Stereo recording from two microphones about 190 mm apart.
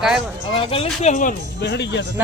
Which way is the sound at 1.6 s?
65° left (ahead or behind).